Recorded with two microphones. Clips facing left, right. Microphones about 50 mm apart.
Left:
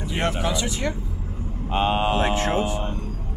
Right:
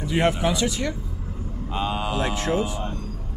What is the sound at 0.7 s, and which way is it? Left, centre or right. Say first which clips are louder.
Speech: even; left.